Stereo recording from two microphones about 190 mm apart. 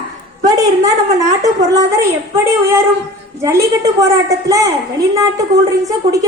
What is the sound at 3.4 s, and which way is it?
A woman's voice, 15° right (ahead or behind).